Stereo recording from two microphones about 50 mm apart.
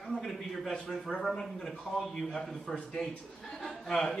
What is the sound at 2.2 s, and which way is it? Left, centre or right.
A man's voice, centre.